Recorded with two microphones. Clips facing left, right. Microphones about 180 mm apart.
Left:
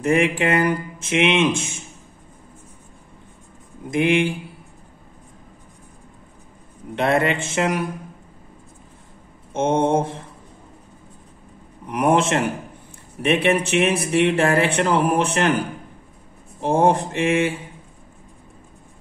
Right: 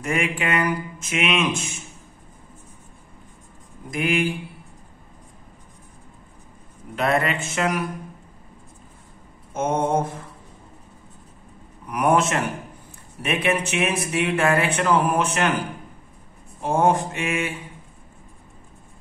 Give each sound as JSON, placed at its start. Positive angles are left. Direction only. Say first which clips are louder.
{"t": 0.0, "sound": "speech", "louder": "left 6 dB", "side_deg": 30}
{"t": 3.9, "sound": "speech", "louder": "left 4 dB", "side_deg": 25}
{"t": 7.0, "sound": "speech", "louder": "left 3 dB", "side_deg": 25}
{"t": 9.5, "sound": "speech", "louder": "left 3 dB", "side_deg": 30}
{"t": 11.9, "sound": "speech", "louder": "left 2 dB", "side_deg": 30}
{"t": 16.6, "sound": "speech", "louder": "left 2 dB", "side_deg": 30}